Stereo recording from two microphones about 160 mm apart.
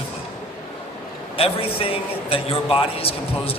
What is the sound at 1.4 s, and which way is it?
A man's voice, 35° left (ahead or behind).